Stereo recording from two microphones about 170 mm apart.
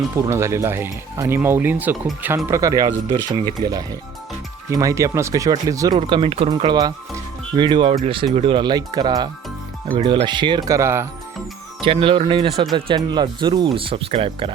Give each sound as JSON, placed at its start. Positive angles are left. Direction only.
{"t": 0.3, "sound": "speech", "side_deg": -15}
{"t": 6.0, "sound": "speech", "side_deg": -30}
{"t": 11.8, "sound": "speech", "side_deg": -30}